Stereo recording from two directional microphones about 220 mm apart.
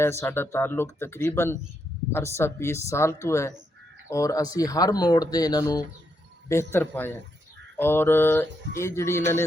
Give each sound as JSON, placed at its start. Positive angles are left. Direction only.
{"t": 0.0, "sound": "speech", "side_deg": 10}